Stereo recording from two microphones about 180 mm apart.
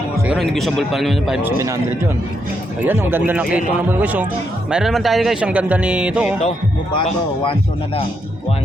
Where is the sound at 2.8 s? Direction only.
10° right (ahead or behind).